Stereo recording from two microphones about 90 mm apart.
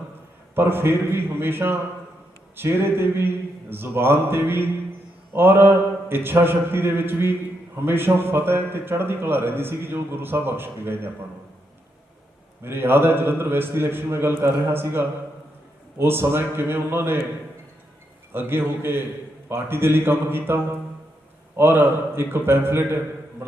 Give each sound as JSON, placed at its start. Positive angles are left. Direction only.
{"t": 0.5, "sound": "a man's voice", "side_deg": -25}
{"t": 12.6, "sound": "a man's voice", "side_deg": -25}
{"t": 18.3, "sound": "a man's voice", "side_deg": -25}